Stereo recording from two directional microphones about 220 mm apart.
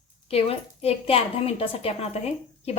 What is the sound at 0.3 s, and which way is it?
A woman's voice, 25° left (ahead or behind).